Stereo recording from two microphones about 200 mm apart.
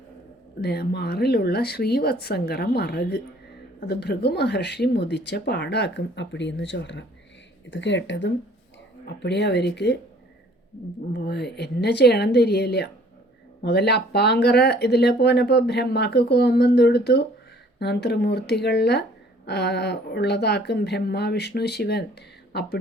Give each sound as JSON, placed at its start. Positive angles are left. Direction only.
{"t": 0.6, "sound": "speech", "side_deg": 55}
{"t": 11.1, "sound": "speech", "side_deg": 55}